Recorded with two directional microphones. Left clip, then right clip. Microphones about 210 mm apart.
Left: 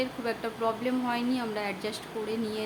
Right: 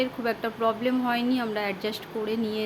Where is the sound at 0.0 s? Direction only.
20° right (ahead or behind).